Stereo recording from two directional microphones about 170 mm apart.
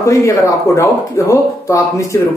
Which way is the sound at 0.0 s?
20° left (ahead or behind).